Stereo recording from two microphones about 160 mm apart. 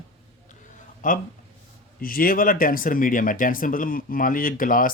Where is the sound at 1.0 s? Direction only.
55° left (ahead or behind).